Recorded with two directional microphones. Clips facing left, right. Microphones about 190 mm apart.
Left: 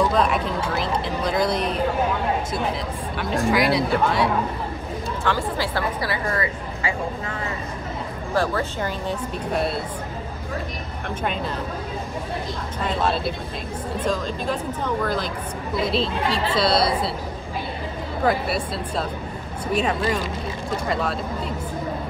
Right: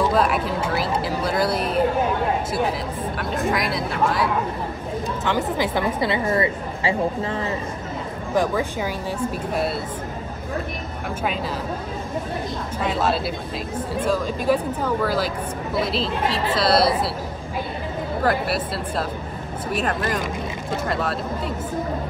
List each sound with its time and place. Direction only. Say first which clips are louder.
0.1 s speech: right 1 dB; 5° right (ahead or behind)
3.2 s speech: left 4 dB; centre (ahead or behind)
5.2 s a woman's voice: right 2 dB; 20° right (ahead or behind)
8.4 s speech: right 2 dB; 15° right (ahead or behind)
9.5 s speech: left 2 dB; centre (ahead or behind)
12.8 s speech: right 1 dB; 5° right (ahead or behind)
18.2 s speech: left 1 dB; centre (ahead or behind)